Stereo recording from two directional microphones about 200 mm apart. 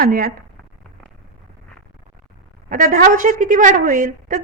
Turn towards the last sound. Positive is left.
turn(degrees=-40)  # may be behind; listen again after turning